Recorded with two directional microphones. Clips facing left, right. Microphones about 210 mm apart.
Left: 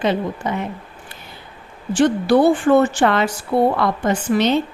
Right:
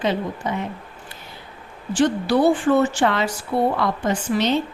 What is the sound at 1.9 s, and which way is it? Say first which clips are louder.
A woman's voice: left 4 dB; 55° left (ahead or behind).